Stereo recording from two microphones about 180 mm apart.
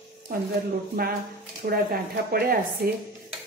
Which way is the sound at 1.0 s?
55° right (ahead or behind).